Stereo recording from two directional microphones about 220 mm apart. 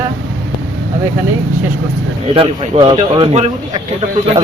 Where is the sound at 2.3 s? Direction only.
25° right (ahead or behind).